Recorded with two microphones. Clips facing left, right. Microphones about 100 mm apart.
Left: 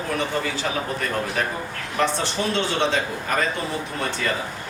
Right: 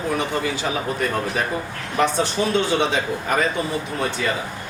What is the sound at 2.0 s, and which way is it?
Speech, 15° right (ahead or behind).